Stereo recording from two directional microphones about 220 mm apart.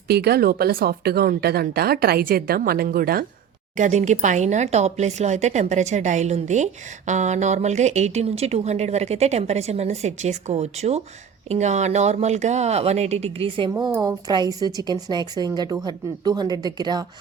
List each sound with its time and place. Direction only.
0.1 s speech: 45° right (ahead or behind); by 13.7 s 25° right (ahead or behind)
13.7 s a woman's voice: 15° right (ahead or behind)